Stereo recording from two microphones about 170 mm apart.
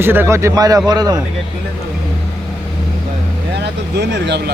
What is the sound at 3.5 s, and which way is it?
Speech, 85° right.